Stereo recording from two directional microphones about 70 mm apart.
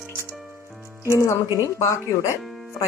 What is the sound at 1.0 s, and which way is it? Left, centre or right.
Speech, left.